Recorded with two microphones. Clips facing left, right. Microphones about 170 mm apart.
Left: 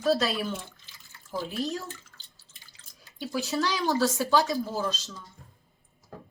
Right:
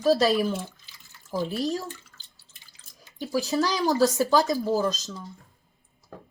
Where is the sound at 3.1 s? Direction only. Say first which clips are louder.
Right 4 dB; 35° right (ahead or behind).